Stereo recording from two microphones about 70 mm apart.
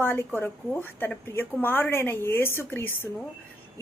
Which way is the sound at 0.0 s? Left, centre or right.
Left.